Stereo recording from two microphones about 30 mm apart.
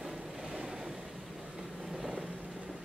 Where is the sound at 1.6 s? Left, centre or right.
Centre.